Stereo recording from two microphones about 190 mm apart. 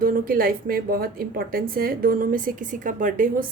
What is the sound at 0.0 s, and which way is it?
A woman's voice, 50° right (ahead or behind).